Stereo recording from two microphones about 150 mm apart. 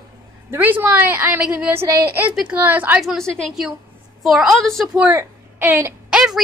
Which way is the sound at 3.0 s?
Centre (ahead or behind).